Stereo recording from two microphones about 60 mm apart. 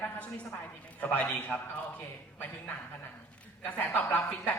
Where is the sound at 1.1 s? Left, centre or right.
Left.